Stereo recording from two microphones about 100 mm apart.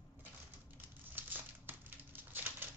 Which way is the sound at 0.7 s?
20° right (ahead or behind).